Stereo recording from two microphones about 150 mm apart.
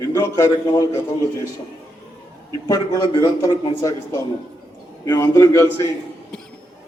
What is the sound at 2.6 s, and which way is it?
Speech, 25° left (ahead or behind).